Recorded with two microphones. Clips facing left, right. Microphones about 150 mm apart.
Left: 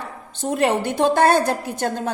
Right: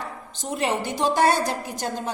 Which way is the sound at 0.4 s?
55° left (ahead or behind).